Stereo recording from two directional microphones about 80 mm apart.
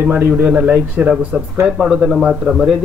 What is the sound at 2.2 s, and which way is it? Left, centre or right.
Speech, centre.